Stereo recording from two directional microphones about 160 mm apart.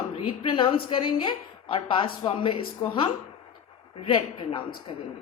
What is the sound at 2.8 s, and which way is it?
Speech, 20° left (ahead or behind).